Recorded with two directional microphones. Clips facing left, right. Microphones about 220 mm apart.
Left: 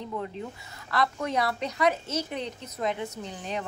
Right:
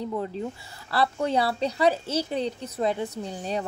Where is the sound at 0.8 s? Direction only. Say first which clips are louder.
Right 3 dB; 30° right (ahead or behind).